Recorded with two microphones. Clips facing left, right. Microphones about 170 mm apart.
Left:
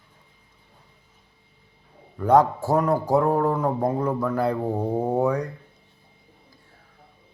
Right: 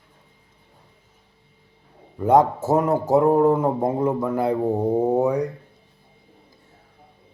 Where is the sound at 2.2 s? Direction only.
20° right (ahead or behind).